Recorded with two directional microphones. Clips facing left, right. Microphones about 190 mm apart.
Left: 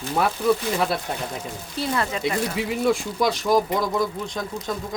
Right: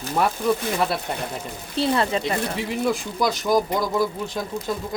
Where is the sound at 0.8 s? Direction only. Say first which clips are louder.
Even; centre (ahead or behind).